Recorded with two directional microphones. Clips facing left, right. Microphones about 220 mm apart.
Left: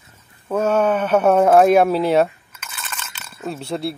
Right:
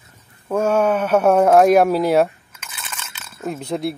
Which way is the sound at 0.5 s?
10° right (ahead or behind).